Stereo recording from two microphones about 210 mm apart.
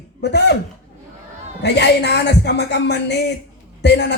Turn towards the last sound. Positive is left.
turn(degrees=55)  # may be behind; listen again after turning